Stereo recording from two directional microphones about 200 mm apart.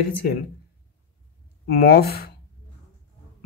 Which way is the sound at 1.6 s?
50° left (ahead or behind).